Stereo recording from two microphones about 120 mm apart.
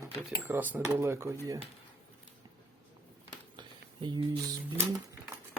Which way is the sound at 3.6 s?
40° right (ahead or behind).